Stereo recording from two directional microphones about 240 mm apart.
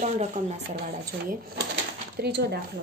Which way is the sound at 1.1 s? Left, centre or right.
Right.